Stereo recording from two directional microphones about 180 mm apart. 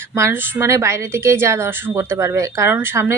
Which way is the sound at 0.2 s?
15° right (ahead or behind).